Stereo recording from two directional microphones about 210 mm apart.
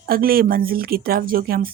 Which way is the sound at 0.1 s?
45° right (ahead or behind).